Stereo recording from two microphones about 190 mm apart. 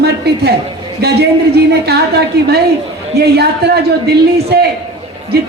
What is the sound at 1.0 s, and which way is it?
Speech, 60° right (ahead or behind).